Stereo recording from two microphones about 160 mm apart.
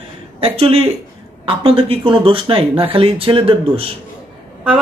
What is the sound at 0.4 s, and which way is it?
Speech, 35° right (ahead or behind).